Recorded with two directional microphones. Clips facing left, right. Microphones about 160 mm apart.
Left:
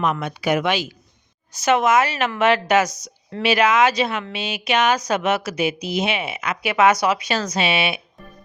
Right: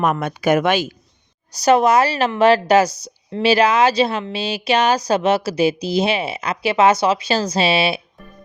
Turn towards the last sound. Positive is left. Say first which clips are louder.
# right 4 dB
turn(degrees=-30)  # may be behind; listen again after turning